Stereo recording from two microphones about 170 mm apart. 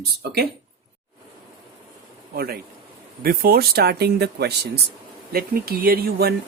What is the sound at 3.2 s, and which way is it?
Speech, 60° right (ahead or behind).